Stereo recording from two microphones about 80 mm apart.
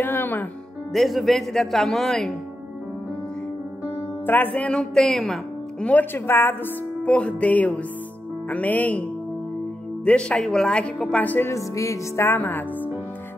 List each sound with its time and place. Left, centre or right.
0.0 s music: left
0.9 s a man's voice: centre
4.3 s speech: centre
6.1 s speech: left
7.0 s speech: centre
11.4 s music: left
12.3 s speech: left